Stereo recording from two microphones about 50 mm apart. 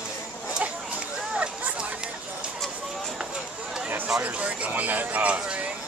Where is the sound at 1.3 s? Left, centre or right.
Right.